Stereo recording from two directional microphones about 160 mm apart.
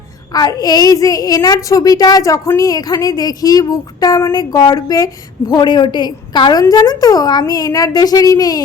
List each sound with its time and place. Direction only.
0.3 s a woman's voice: 25° left (ahead or behind)